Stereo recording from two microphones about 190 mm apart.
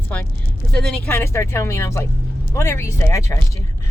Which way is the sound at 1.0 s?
15° left (ahead or behind).